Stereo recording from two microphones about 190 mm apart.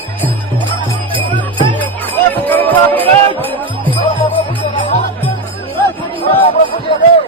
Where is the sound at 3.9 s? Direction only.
25° left (ahead or behind).